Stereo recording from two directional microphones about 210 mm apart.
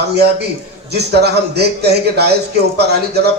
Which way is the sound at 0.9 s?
50° right (ahead or behind).